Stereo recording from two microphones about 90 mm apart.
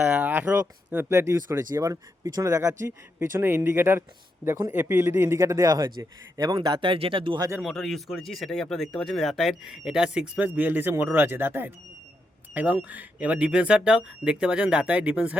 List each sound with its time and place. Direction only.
0.1 s speech: 20° right (ahead or behind)
1.1 s speech: 30° right (ahead or behind)
5.4 s speech: 40° right (ahead or behind); by 7.3 s 80° right
7.6 s speech: 5° left (ahead or behind); by 15.4 s 15° right (ahead or behind)